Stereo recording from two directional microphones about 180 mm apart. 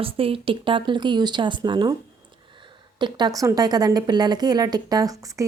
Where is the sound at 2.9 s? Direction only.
25° right (ahead or behind).